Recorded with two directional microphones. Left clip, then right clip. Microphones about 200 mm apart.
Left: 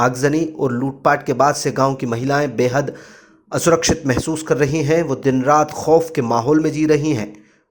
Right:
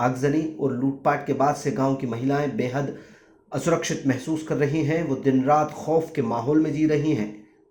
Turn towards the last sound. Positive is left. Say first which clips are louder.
# left 6 dB
turn(degrees=50)  # may be behind; listen again after turning